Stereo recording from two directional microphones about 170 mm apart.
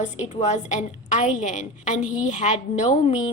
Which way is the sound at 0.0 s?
45° left (ahead or behind).